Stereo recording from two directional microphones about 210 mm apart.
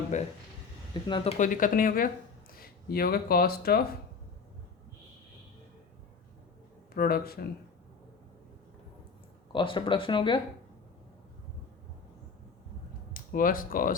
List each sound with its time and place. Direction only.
0.1 s speech: 35° left (ahead or behind)
6.9 s speech: 45° left (ahead or behind)
9.5 s speech: 25° left (ahead or behind)
13.1 s speech: 40° left (ahead or behind)